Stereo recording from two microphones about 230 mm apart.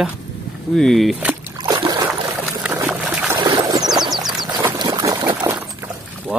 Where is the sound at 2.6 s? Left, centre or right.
Centre.